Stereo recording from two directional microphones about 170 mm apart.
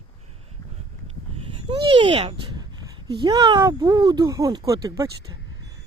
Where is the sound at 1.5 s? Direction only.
30° right (ahead or behind).